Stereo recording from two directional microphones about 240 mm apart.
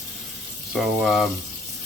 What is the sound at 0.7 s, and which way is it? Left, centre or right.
Speech, centre.